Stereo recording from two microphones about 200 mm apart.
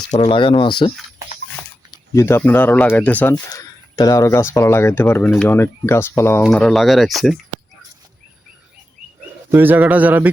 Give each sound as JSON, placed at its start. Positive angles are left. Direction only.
{"t": 0.1, "sound": "speech", "side_deg": 30}
{"t": 2.1, "sound": "speech", "side_deg": 10}
{"t": 3.5, "sound": "speech", "side_deg": 20}
{"t": 9.5, "sound": "speech", "side_deg": -10}